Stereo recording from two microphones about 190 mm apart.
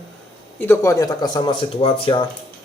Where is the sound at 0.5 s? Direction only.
15° left (ahead or behind).